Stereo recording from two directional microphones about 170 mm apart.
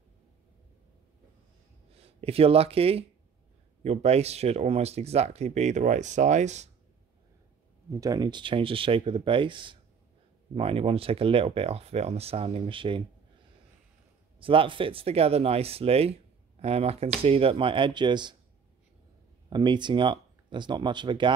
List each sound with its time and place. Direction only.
2.0 s speech: 35° right (ahead or behind)
7.9 s speech: 20° right (ahead or behind)
14.4 s speech: 30° right (ahead or behind)
19.5 s speech: 25° right (ahead or behind)